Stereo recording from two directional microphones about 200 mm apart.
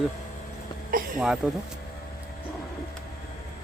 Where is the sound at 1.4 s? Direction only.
5° right (ahead or behind).